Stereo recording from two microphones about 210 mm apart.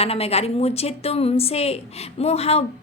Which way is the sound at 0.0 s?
30° left (ahead or behind).